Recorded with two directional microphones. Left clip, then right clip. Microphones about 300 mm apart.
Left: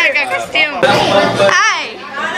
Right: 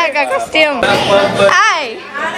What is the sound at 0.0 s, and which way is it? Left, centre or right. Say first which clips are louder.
Speech: even; centre.